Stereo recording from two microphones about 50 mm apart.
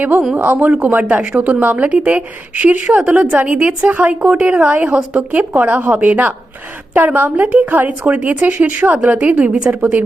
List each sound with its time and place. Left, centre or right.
0.3 s a woman's voice: right